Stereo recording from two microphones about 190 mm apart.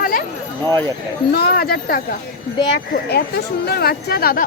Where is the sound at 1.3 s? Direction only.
55° left (ahead or behind).